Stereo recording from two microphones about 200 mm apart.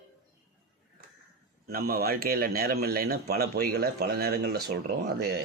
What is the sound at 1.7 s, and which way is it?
A man's voice, 50° right (ahead or behind).